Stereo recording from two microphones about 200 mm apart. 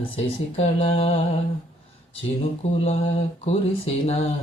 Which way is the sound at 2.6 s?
35° left (ahead or behind).